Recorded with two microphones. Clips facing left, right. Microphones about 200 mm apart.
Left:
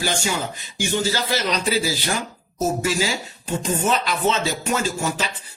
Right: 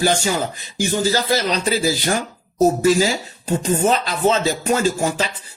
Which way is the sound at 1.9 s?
50° right (ahead or behind).